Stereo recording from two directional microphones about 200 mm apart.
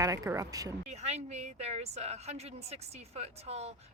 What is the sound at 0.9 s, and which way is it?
A woman's voice, 35° right (ahead or behind).